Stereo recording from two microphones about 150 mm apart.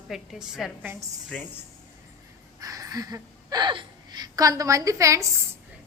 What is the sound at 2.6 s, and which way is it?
A woman's voice, 25° right (ahead or behind).